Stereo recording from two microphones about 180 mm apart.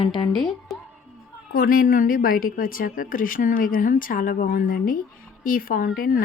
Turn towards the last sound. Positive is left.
turn(degrees=50)  # may be behind; listen again after turning